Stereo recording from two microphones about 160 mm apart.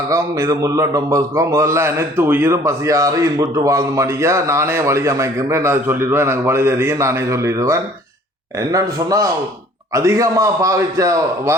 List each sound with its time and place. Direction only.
0.1 s a man's voice: 20° right (ahead or behind)